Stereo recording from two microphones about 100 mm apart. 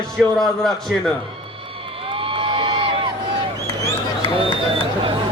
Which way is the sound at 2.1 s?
60° right (ahead or behind).